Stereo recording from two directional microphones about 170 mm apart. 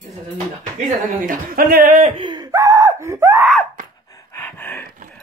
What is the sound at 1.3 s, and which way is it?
Speech, 55° right (ahead or behind).